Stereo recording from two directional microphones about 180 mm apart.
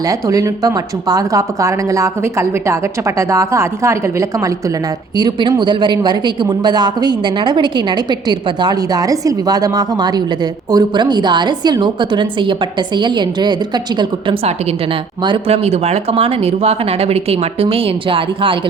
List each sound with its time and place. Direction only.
0.1 s speech: 20° right (ahead or behind)